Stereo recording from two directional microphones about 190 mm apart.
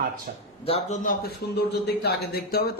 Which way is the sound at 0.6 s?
35° left (ahead or behind).